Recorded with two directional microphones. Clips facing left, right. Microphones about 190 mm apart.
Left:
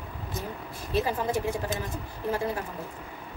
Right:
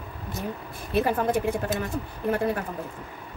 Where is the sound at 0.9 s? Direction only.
55° right (ahead or behind).